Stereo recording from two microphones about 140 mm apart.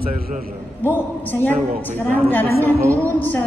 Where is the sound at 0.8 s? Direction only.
15° left (ahead or behind).